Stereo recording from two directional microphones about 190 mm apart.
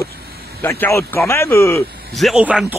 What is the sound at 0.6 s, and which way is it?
Speech, 10° left (ahead or behind).